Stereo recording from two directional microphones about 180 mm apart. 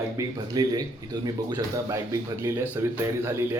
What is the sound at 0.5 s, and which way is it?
A man's voice, 20° right (ahead or behind).